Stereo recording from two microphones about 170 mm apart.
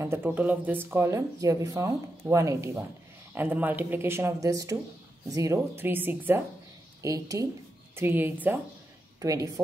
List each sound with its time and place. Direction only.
0.0 s speech: 15° right (ahead or behind)